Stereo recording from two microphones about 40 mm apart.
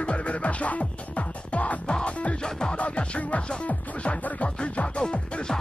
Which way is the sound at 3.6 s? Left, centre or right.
Left.